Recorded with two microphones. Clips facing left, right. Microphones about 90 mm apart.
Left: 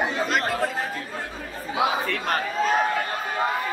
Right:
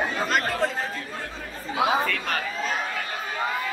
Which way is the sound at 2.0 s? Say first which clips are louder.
Left 2 dB; 35° left (ahead or behind).